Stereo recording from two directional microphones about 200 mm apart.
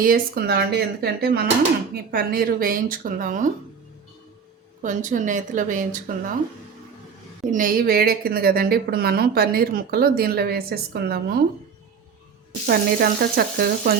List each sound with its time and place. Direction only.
0.0 s a woman's voice: 45° right (ahead or behind)
4.8 s speech: 40° right (ahead or behind)
7.5 s a woman's voice: 45° right (ahead or behind)
12.6 s a woman's voice: 50° right (ahead or behind)